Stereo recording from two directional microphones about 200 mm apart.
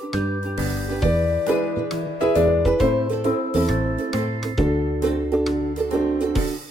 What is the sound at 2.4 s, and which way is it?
Music, centre (ahead or behind).